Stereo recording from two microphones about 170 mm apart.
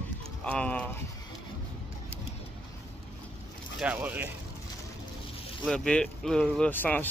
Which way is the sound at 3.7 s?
10° right (ahead or behind).